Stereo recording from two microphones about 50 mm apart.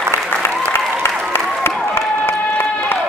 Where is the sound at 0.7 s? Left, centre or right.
Left.